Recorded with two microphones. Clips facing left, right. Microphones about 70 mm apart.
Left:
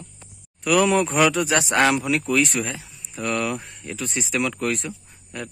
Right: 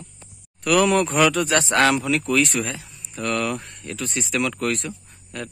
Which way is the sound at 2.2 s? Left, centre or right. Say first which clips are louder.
Right 1 dB; centre.